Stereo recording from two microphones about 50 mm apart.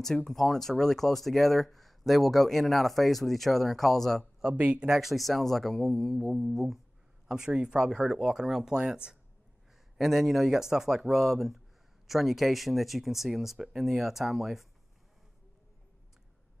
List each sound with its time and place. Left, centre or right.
0.0 s speech: centre
4.6 s speech: right
4.8 s speech: centre
7.2 s speech: centre
9.9 s speech: centre